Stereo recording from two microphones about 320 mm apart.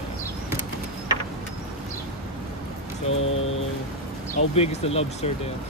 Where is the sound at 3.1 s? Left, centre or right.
Left.